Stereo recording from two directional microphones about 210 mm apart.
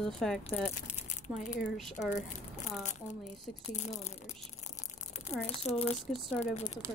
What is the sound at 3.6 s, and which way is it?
Speech, 35° left (ahead or behind).